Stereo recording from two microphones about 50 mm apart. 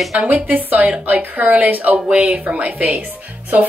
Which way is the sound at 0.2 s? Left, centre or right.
Right.